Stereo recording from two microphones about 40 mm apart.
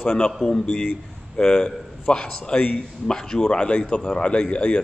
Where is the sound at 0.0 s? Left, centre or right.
Left.